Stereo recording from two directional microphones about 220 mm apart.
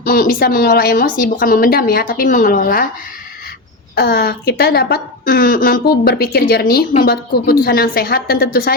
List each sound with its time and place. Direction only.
0.0 s speech: 40° left (ahead or behind)
3.9 s a woman's voice: 45° left (ahead or behind)